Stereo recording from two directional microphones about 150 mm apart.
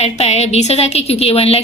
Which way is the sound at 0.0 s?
45° left (ahead or behind).